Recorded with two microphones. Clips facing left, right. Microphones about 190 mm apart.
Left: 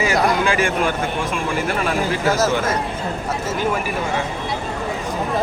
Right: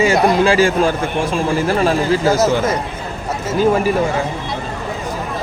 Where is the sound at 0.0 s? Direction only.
25° right (ahead or behind).